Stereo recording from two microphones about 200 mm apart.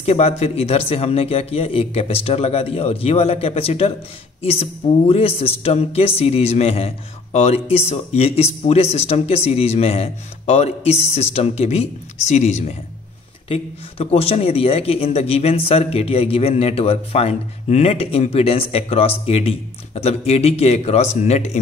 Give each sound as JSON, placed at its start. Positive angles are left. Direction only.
{"t": 0.0, "sound": "speech", "side_deg": 30}